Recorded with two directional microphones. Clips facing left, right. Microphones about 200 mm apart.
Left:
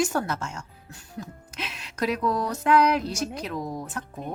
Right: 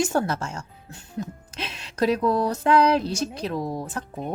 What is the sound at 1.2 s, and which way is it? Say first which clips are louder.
Music: right 4 dB; 30° right (ahead or behind).